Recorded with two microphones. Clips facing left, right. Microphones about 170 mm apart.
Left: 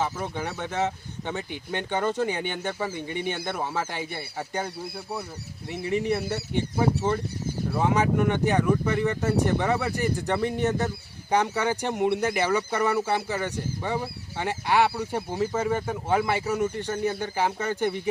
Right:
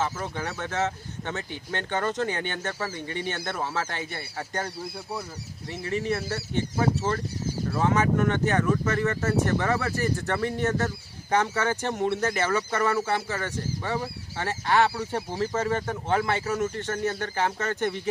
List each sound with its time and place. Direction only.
0.0 s speech: 10° left (ahead or behind)
5.8 s speech: 15° left (ahead or behind)